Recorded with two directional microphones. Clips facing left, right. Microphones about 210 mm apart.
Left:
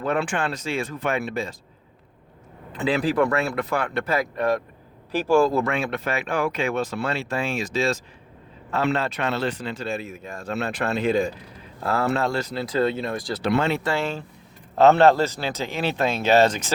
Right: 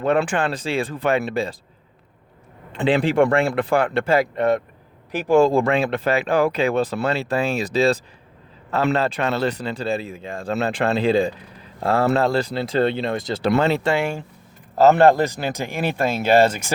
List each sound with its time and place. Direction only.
0.2 s speech: 35° right (ahead or behind)
2.7 s speech: 30° right (ahead or behind)
13.5 s speech: 35° right (ahead or behind)
13.8 s speech: 15° right (ahead or behind)